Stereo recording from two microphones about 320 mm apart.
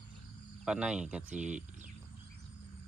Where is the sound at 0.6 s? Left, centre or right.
Centre.